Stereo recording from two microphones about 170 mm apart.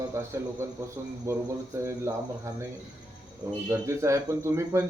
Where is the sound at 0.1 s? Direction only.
15° right (ahead or behind).